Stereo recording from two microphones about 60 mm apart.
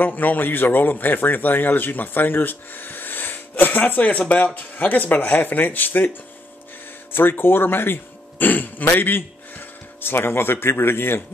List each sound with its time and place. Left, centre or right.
0.0 s speech: left